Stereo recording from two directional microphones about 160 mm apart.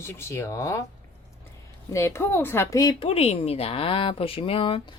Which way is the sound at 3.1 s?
40° left (ahead or behind).